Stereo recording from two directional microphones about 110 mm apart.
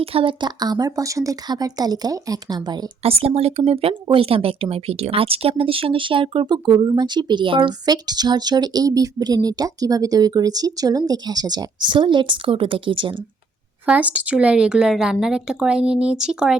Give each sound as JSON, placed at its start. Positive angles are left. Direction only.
{"t": 0.0, "sound": "a woman's voice", "side_deg": -55}
{"t": 3.0, "sound": "speech", "side_deg": -65}
{"t": 13.8, "sound": "speech", "side_deg": -10}